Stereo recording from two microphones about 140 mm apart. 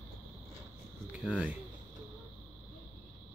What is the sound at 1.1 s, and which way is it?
Cricket, 5° right (ahead or behind).